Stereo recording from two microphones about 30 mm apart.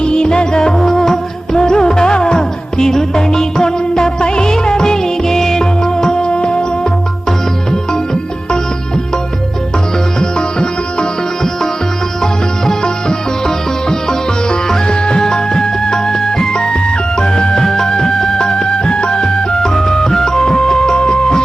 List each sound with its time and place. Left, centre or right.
0.0 s music: left
0.8 s music: centre
6.3 s music: left
7.3 s music: left
10.2 s music: left
12.2 s music: left
14.8 s music: left
16.5 s music: left
17.6 s music: centre